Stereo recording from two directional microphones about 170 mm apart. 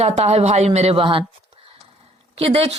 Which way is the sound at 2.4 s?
35° right (ahead or behind).